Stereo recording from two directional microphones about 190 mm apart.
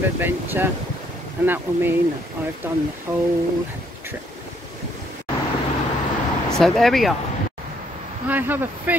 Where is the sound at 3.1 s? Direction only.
20° right (ahead or behind).